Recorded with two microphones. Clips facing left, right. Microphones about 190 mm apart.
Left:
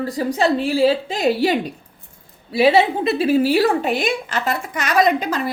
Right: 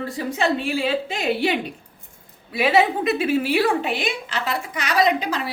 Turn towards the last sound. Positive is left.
turn(degrees=45)  # may be behind; listen again after turning